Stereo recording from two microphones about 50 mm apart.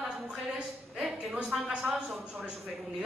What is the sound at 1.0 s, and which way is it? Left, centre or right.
A woman's voice, centre.